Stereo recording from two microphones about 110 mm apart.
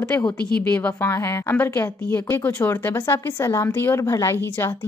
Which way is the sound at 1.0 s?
25° left (ahead or behind).